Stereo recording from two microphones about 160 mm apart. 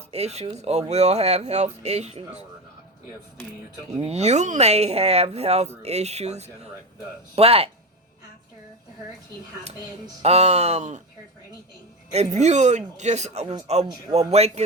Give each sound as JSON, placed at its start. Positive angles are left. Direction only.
{"t": 0.1, "sound": "speech", "side_deg": -40}
{"t": 3.8, "sound": "speech", "side_deg": -45}
{"t": 10.2, "sound": "speech", "side_deg": -40}
{"t": 12.1, "sound": "speech", "side_deg": -45}